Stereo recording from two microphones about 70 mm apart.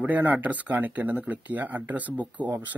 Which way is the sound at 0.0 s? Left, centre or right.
Right.